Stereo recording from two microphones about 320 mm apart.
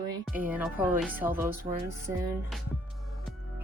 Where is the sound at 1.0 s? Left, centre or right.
Centre.